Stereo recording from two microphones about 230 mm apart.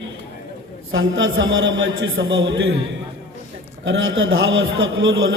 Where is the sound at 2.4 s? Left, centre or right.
Right.